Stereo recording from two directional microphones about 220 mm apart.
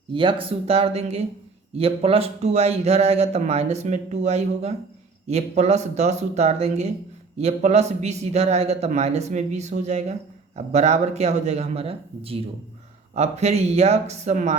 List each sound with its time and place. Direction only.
0.1 s a man's voice: 20° right (ahead or behind)